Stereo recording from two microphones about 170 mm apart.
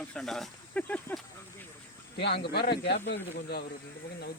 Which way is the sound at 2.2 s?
75° left (ahead or behind).